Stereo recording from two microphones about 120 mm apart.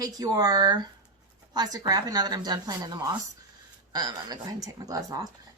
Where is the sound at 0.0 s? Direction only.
30° right (ahead or behind).